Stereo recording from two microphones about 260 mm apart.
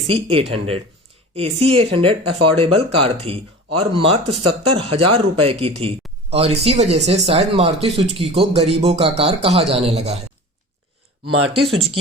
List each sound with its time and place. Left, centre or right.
0.1 s speech: right
11.3 s speech: right